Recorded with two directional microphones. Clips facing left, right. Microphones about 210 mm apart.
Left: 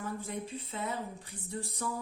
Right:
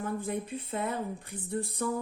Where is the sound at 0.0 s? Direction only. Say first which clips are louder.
Right 5 dB; 55° right (ahead or behind).